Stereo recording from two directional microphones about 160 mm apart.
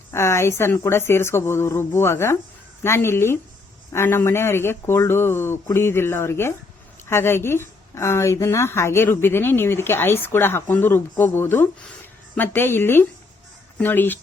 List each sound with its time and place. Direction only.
0.1 s a woman's voice: 15° left (ahead or behind)